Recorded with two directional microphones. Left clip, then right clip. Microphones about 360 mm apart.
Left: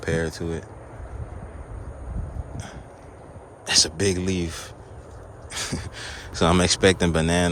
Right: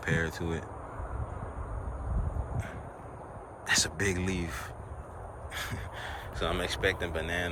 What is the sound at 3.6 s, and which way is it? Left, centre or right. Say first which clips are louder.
Speech: left 8 dB; centre.